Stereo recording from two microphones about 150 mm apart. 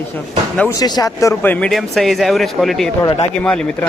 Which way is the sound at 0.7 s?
25° left (ahead or behind).